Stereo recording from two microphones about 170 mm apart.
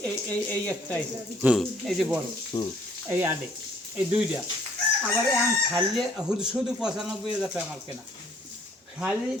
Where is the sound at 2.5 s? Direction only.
35° left (ahead or behind).